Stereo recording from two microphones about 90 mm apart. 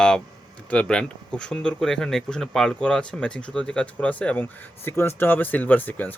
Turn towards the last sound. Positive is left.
turn(degrees=20)  # may be behind; listen again after turning